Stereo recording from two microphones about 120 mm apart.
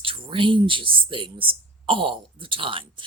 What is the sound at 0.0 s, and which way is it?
Speech, 45° right (ahead or behind).